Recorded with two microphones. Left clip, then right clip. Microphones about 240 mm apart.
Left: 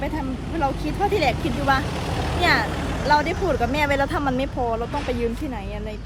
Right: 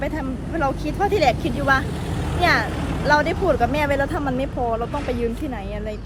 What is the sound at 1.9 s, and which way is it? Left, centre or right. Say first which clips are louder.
Vehicle: left 2 dB; left.